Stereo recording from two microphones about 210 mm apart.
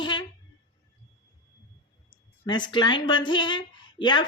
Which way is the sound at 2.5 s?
20° left (ahead or behind).